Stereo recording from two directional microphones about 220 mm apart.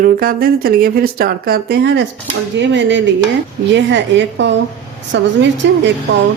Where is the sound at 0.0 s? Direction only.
40° right (ahead or behind).